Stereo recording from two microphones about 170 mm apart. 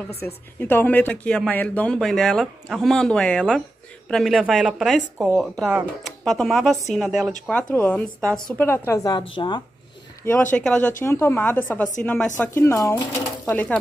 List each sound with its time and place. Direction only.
0.2 s a woman's voice: 10° left (ahead or behind)
7.7 s a woman's voice: 10° left (ahead or behind)
10.2 s a woman's voice: 15° left (ahead or behind)
13.5 s a woman's voice: 10° left (ahead or behind)